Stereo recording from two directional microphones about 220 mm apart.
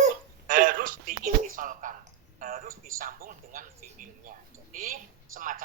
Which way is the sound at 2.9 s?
40° right (ahead or behind).